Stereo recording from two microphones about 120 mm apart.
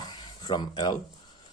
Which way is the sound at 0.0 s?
35° left (ahead or behind).